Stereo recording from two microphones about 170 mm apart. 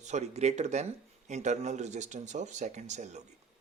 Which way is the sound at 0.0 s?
40° right (ahead or behind).